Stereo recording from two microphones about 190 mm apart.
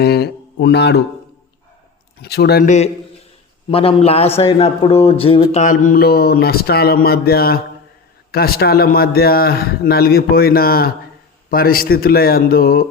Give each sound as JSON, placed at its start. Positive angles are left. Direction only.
{"t": 0.0, "sound": "speech", "side_deg": 60}
{"t": 2.2, "sound": "speech", "side_deg": 60}
{"t": 2.6, "sound": "a man's voice", "side_deg": 35}